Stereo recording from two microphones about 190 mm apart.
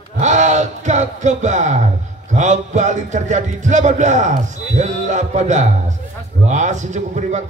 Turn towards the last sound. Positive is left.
turn(degrees=-40)  # may be behind; listen again after turning